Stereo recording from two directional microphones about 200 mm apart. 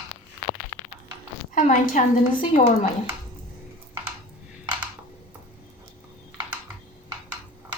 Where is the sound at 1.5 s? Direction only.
40° left (ahead or behind).